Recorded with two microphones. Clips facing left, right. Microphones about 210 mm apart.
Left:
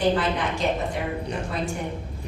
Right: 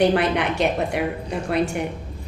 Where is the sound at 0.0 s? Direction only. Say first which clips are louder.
Right 4 dB; 70° right (ahead or behind).